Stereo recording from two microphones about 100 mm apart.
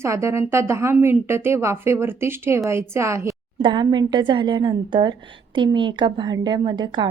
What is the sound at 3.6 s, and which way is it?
A woman's voice, 50° right (ahead or behind).